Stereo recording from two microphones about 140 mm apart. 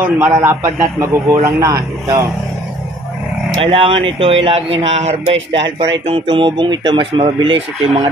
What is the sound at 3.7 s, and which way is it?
Speech, 40° right (ahead or behind).